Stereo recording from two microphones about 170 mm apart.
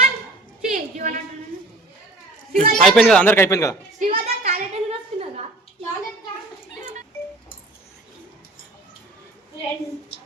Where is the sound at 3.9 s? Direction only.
50° right (ahead or behind).